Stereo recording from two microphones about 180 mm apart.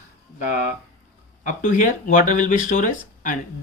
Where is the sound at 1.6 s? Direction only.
45° left (ahead or behind).